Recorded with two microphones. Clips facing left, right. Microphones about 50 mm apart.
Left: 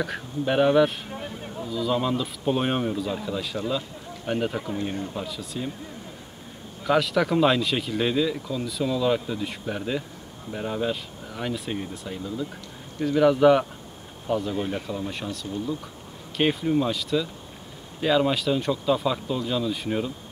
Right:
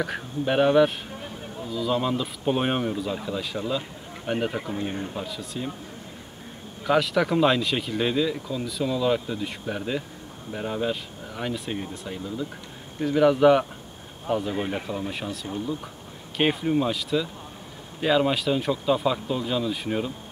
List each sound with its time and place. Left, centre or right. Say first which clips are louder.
0.0 s speech: even; centre
6.8 s speech: even; centre
14.2 s speech: even; centre
15.0 s speech: even; centre